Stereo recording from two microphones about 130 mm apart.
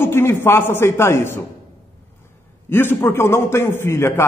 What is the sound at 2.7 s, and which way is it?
A man's voice, 15° left (ahead or behind).